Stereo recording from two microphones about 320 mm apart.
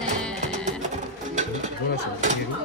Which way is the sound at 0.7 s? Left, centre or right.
Right.